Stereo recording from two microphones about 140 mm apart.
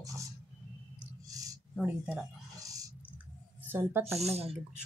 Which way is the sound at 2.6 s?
25° right (ahead or behind).